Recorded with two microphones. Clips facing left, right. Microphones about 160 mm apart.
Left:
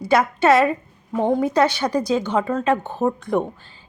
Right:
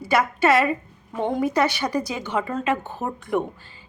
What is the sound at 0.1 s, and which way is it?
A woman's voice, 5° right (ahead or behind).